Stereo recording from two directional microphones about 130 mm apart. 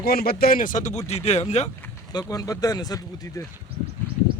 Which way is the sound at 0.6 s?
80° left.